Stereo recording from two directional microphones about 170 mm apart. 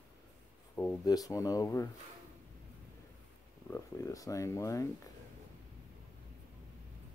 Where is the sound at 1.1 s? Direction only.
20° left (ahead or behind).